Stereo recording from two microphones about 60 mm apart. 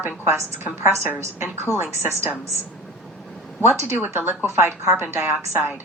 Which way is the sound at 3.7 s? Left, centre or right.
Right.